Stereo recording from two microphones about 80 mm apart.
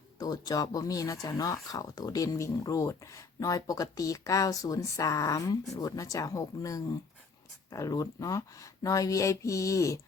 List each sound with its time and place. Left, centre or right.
0.2 s speech: left